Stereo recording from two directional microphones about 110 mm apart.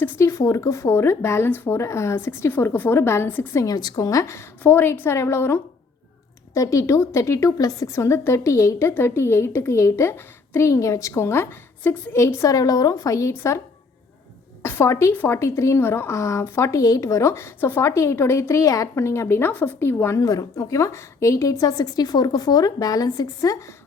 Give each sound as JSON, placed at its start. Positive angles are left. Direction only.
{"t": 0.0, "sound": "a woman's voice", "side_deg": 25}
{"t": 3.7, "sound": "a woman's voice", "side_deg": 35}
{"t": 14.6, "sound": "a woman's voice", "side_deg": 25}
{"t": 20.1, "sound": "a woman's voice", "side_deg": 30}